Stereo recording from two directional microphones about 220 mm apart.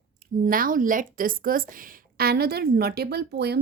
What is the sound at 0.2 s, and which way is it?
A woman's voice, 40° right (ahead or behind).